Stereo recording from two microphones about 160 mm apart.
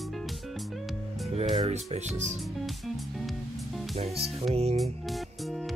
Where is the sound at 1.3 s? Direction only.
40° right (ahead or behind).